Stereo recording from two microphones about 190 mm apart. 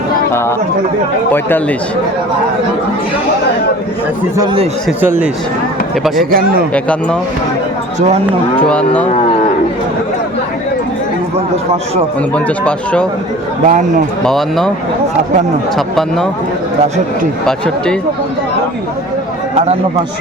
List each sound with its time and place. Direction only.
1.3 s speech: 10° left (ahead or behind)
4.9 s speech: 10° right (ahead or behind)
6.3 s a man's voice: 50° right (ahead or behind)
6.7 s speech: 5° left (ahead or behind)
8.5 s speech: 5° left (ahead or behind)
12.6 s speech: 5° left (ahead or behind)
13.7 s speech: 40° right (ahead or behind)
14.3 s speech: centre (ahead or behind)
16.0 s speech: 5° left (ahead or behind)